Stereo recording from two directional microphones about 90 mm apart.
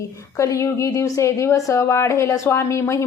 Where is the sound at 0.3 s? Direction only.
35° left (ahead or behind).